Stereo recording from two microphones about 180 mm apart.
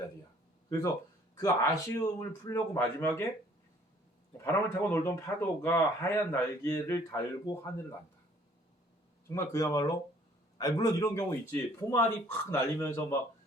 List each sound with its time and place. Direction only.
1.4 s speech: 15° left (ahead or behind)
4.4 s speech: 15° left (ahead or behind)
9.2 s speech: 15° left (ahead or behind)